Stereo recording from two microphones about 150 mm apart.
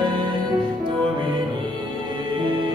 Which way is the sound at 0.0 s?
30° right (ahead or behind).